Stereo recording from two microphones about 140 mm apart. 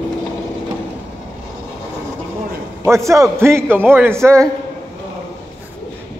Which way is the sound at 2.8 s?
20° right (ahead or behind).